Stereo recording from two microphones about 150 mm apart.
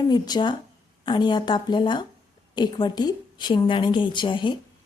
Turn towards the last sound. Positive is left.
turn(degrees=30)  # may be behind; listen again after turning